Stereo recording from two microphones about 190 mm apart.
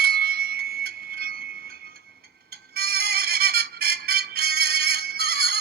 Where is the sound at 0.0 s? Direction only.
55° right (ahead or behind).